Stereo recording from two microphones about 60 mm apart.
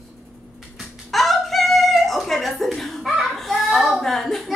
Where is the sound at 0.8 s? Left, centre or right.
Centre.